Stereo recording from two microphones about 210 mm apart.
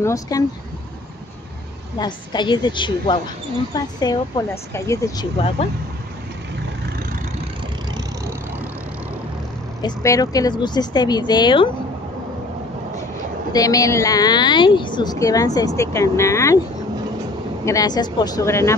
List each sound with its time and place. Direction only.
0.0 s speech: 15° left (ahead or behind)
2.0 s speech: 20° left (ahead or behind)
9.8 s speech: 15° left (ahead or behind)
13.5 s speech: 15° left (ahead or behind)
17.6 s speech: 20° left (ahead or behind)